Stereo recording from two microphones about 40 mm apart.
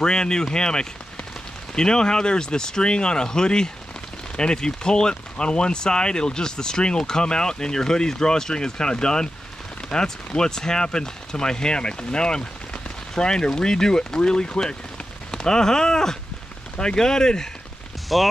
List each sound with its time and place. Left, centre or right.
0.0 s speech: centre
18.1 s speech: centre